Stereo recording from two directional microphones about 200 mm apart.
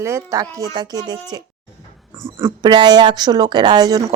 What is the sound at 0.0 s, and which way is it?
Speech, 15° right (ahead or behind).